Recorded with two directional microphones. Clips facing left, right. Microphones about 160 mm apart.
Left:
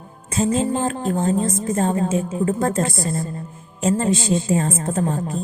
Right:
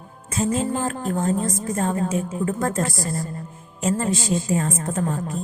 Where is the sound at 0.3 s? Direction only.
25° left (ahead or behind).